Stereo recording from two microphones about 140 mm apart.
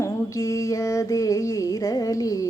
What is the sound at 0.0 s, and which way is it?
Female singing, 25° left (ahead or behind).